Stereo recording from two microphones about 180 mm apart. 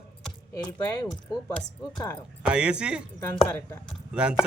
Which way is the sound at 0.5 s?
20° left (ahead or behind).